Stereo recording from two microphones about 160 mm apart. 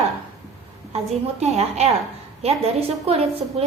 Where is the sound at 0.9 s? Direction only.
40° right (ahead or behind).